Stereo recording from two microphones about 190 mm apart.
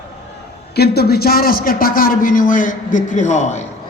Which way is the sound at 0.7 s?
55° left (ahead or behind).